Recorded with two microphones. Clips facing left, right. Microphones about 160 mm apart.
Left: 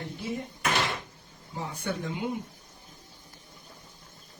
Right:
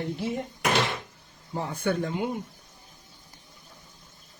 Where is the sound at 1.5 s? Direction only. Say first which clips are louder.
Right 6 dB; 55° right (ahead or behind).